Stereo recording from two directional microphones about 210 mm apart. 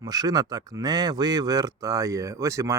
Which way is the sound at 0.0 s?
20° right (ahead or behind).